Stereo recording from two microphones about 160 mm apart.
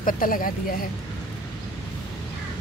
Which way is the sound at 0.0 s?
60° left (ahead or behind).